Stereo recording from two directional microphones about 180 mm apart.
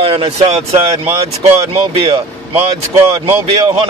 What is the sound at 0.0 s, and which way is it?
Speech, 30° right (ahead or behind).